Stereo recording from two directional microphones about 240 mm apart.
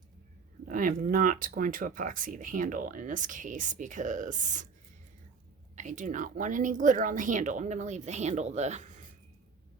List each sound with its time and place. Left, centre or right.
0.6 s speech: right
5.7 s speech: right